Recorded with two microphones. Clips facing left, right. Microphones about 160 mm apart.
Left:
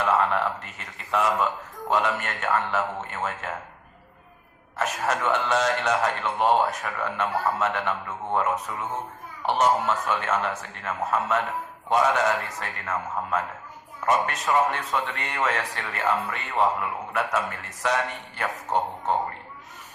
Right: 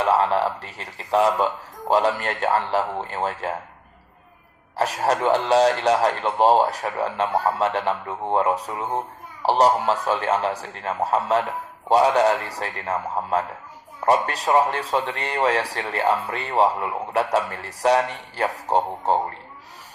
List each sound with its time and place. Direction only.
0.0 s a man's voice: 35° right (ahead or behind)
4.8 s a man's voice: 35° right (ahead or behind)